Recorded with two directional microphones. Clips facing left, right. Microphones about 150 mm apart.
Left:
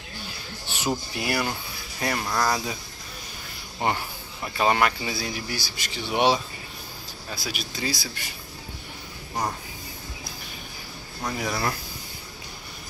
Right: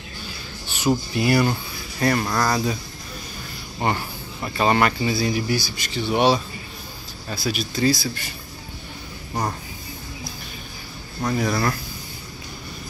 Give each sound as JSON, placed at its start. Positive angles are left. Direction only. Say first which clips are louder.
{"t": 0.7, "sound": "a sound", "louder": "right 6 dB", "side_deg": 25}
{"t": 1.1, "sound": "speech", "louder": "right 8 dB", "side_deg": 5}
{"t": 4.4, "sound": "speech", "louder": "right 3 dB", "side_deg": 5}
{"t": 6.0, "sound": "speech", "louder": "right 3 dB", "side_deg": 15}
{"t": 11.2, "sound": "speech", "louder": "right 5 dB", "side_deg": 10}